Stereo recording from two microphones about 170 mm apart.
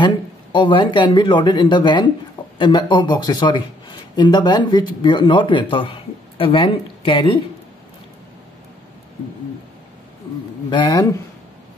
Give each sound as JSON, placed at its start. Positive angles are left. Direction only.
{"t": 0.0, "sound": "a man's voice", "side_deg": 30}
{"t": 10.7, "sound": "a man's voice", "side_deg": 25}